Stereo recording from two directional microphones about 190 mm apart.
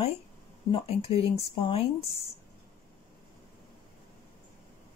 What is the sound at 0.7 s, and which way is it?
Speech, 30° left (ahead or behind).